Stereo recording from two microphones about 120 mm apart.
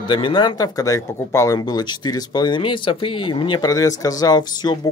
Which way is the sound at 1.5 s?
35° left (ahead or behind).